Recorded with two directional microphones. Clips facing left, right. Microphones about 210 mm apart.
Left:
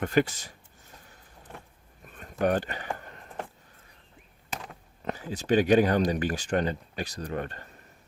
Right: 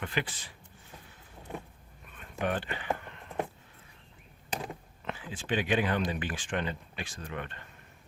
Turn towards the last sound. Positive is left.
turn(degrees=40)  # may be behind; listen again after turning